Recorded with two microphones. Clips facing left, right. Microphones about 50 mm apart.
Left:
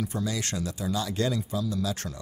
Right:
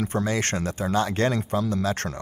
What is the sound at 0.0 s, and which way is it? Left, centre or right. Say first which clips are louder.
Speech: right 6 dB; right.